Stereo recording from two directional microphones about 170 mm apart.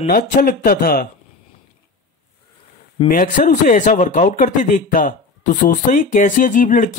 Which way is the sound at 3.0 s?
50° left (ahead or behind).